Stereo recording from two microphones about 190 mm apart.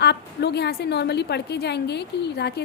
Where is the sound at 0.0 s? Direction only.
60° left (ahead or behind).